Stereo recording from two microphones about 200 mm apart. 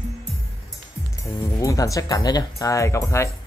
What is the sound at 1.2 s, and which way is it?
Speech, 15° left (ahead or behind).